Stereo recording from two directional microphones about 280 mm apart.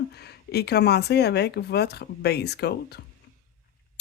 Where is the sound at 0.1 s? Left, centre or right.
Left.